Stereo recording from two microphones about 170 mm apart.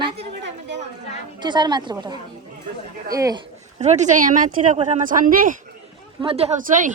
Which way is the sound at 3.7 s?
40° right (ahead or behind).